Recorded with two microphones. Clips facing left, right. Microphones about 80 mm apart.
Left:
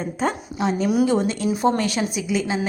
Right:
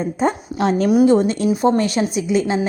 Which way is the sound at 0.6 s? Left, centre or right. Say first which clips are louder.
Right 5 dB; right.